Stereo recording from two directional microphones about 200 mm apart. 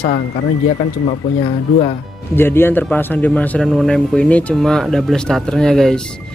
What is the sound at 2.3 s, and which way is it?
Speech, 10° left (ahead or behind).